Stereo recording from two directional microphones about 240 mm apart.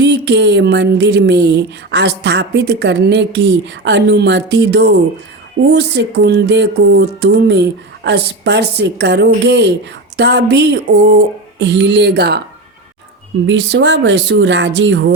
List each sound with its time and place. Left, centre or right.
0.0 s speech: right
13.5 s speech: right